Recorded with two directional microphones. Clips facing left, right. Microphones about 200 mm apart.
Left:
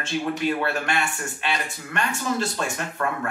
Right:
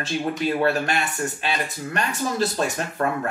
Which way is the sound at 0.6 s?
40° right (ahead or behind).